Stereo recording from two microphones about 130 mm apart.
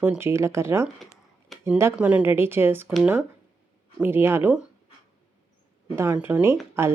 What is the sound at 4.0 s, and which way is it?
Speech, 15° right (ahead or behind).